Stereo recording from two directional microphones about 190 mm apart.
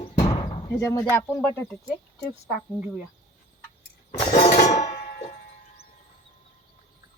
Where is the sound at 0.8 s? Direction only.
15° left (ahead or behind).